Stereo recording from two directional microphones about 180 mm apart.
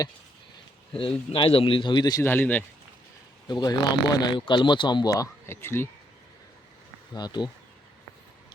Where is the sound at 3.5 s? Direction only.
20° left (ahead or behind).